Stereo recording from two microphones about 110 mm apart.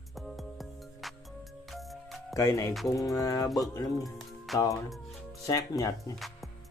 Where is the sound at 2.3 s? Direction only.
30° left (ahead or behind).